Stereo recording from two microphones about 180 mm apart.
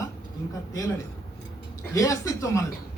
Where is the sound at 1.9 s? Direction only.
15° left (ahead or behind).